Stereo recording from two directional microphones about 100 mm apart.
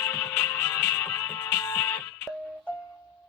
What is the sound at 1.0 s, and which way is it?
Music, 25° left (ahead or behind).